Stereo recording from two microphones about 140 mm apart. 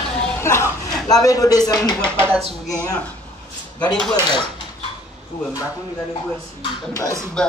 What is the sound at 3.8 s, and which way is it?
Speech, 5° left (ahead or behind).